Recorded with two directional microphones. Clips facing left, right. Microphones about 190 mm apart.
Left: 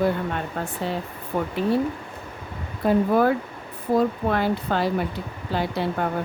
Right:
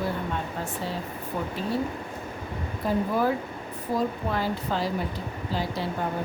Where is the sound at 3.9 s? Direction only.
60° left (ahead or behind).